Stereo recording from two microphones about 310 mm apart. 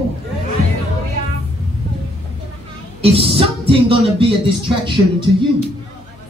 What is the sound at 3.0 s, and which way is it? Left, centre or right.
Speech, centre.